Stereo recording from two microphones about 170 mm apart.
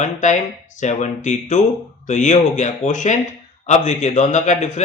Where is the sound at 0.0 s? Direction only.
45° left (ahead or behind).